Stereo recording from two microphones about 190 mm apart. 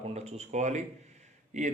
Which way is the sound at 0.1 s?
35° right (ahead or behind).